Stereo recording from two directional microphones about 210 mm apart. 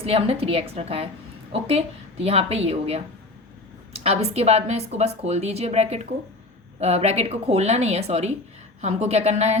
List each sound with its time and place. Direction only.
0.0 s a woman's voice: 25° right (ahead or behind)